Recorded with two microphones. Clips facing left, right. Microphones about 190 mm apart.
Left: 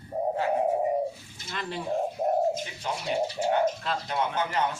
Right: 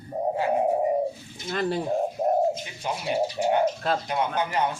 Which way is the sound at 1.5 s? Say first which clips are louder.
Right 8 dB; 40° right (ahead or behind).